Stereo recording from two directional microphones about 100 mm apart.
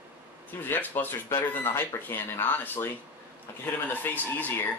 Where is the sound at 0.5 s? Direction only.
20° left (ahead or behind).